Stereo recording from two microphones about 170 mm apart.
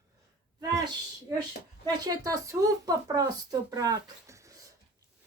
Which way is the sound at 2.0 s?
20° right (ahead or behind).